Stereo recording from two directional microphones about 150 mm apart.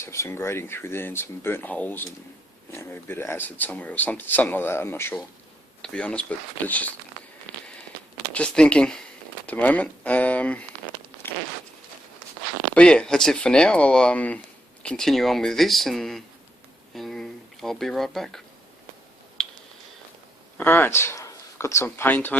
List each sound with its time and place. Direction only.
0.0 s speech: 20° left (ahead or behind)
8.3 s speech: 5° left (ahead or behind)
11.2 s zipper: 15° left (ahead or behind)
12.7 s speech: 5° left (ahead or behind)
16.9 s a sound: centre (ahead or behind)
19.4 s finger snapping: 5° left (ahead or behind)
20.6 s speech: 15° left (ahead or behind)